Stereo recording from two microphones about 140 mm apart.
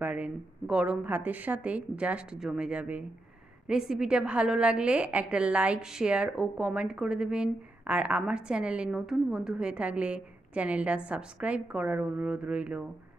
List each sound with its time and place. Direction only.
0.0 s a woman's voice: 10° right (ahead or behind)